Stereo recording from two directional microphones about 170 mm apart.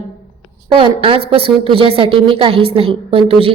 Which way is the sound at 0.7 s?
30° right (ahead or behind).